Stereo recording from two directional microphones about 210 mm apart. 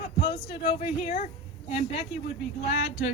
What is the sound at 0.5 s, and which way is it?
A woman's voice, 25° left (ahead or behind).